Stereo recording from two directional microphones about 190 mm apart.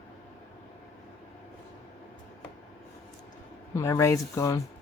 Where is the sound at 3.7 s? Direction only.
15° left (ahead or behind).